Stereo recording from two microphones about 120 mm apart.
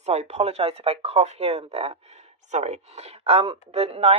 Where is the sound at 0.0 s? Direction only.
65° right (ahead or behind).